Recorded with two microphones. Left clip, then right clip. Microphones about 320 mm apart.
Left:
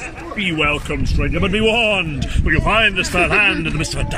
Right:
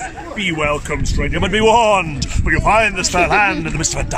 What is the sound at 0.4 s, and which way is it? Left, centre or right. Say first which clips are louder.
Speech: even; right.